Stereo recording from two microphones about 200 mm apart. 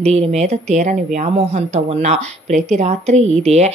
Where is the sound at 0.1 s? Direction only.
35° right (ahead or behind).